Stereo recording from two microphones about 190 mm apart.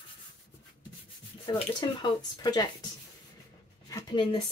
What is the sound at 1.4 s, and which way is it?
Speech, 25° left (ahead or behind).